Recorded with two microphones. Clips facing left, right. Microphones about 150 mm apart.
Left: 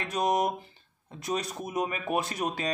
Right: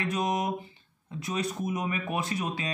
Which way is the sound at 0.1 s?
35° left (ahead or behind).